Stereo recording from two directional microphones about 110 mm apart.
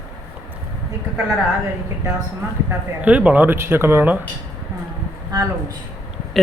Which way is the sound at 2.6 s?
15° right (ahead or behind).